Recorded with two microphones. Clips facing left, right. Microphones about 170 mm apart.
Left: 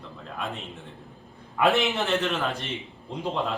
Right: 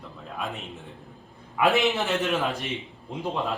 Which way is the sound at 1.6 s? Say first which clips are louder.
Even; centre (ahead or behind).